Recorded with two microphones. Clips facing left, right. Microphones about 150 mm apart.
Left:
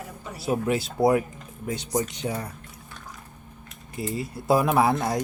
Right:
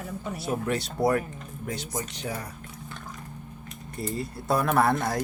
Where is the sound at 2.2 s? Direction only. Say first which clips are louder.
Left 4 dB; 25° left (ahead or behind).